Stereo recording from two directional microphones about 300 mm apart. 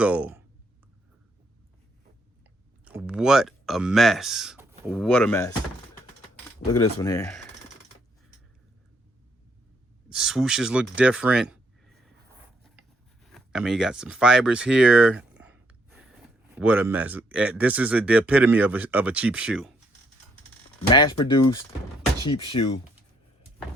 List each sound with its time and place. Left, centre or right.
0.0 s speech: centre
2.8 s speech: centre
7.0 s speech: centre
10.1 s speech: centre
13.2 s a sound: centre
16.6 s speech: centre
20.9 s speech: centre